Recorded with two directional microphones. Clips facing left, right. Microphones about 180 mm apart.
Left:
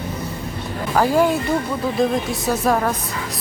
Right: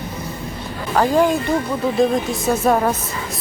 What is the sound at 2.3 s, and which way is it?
Speech, centre (ahead or behind).